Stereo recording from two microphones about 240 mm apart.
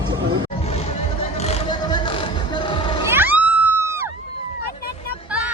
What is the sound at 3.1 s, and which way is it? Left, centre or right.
Music, centre.